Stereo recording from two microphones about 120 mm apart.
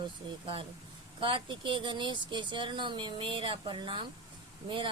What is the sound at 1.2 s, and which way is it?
Speech, 45° right (ahead or behind).